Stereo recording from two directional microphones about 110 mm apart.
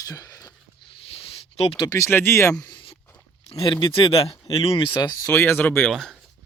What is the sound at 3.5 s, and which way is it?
Speech, 50° left (ahead or behind).